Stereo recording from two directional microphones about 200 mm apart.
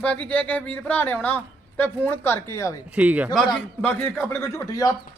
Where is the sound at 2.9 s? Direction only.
5° right (ahead or behind).